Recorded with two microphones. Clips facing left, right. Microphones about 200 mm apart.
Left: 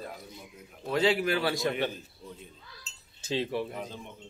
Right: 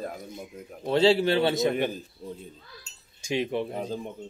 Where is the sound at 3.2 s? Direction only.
15° right (ahead or behind); by 4.1 s 35° right (ahead or behind).